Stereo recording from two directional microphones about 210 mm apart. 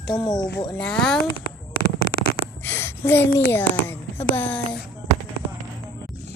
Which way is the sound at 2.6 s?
10° left (ahead or behind).